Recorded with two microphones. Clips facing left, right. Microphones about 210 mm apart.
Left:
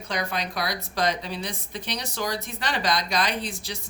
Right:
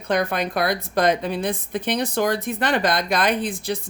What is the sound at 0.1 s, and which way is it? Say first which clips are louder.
A woman's voice: right 8 dB; 55° right (ahead or behind).